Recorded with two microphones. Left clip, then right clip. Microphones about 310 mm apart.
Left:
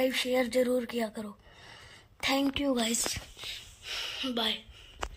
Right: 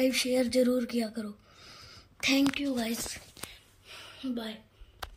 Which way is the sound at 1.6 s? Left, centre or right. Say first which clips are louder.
Even; centre.